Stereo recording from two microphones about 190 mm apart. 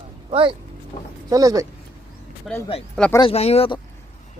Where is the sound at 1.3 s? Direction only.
20° right (ahead or behind).